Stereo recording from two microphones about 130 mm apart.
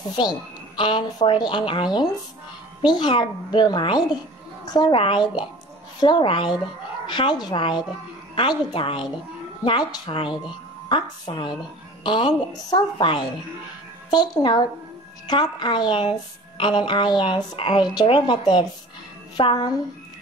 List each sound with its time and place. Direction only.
0.1 s a woman's voice: 35° left (ahead or behind)
4.9 s a woman's voice: 40° left (ahead or behind)